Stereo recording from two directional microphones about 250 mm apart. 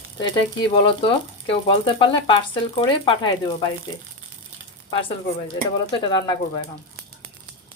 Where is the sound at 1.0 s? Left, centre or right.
Left.